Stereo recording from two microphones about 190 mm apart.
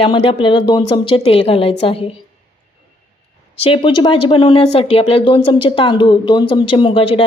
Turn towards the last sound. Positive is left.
turn(degrees=25)  # may be behind; listen again after turning